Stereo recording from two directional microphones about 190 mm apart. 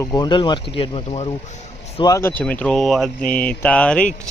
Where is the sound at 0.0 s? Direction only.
20° left (ahead or behind).